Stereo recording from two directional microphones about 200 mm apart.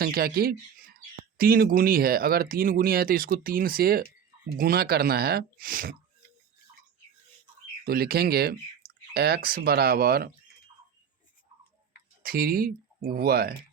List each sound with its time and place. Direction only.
0.0 s speech: 50° right (ahead or behind)
7.9 s speech: 50° right (ahead or behind)
12.2 s speech: 50° right (ahead or behind)